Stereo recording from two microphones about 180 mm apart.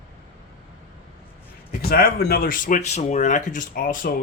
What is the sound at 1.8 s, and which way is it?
Speech, 55° left (ahead or behind).